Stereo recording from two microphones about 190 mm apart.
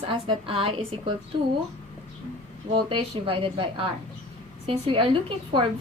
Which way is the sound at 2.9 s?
30° right (ahead or behind).